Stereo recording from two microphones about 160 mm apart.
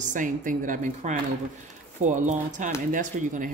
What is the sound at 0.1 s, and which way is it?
A woman's voice, 55° right (ahead or behind).